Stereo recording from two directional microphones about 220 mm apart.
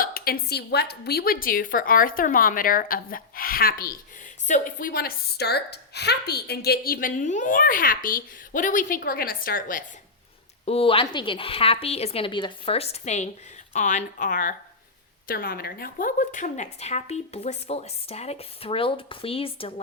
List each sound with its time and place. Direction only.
0.0 s a woman's voice: 40° left (ahead or behind)
10.7 s a woman's voice: 25° left (ahead or behind)